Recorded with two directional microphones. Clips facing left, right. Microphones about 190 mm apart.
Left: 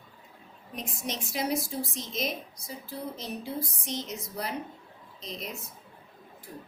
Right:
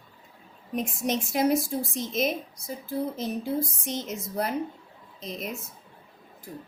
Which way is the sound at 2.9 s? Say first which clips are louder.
Right 8 dB; 50° right (ahead or behind).